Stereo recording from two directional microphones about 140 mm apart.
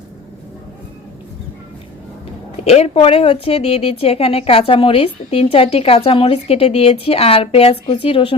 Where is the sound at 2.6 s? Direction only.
45° left (ahead or behind).